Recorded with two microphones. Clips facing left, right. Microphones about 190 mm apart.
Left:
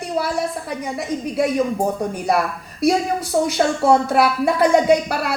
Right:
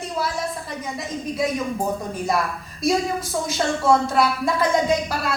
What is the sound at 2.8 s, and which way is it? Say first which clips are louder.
A woman's voice: left 4 dB; 65° left (ahead or behind).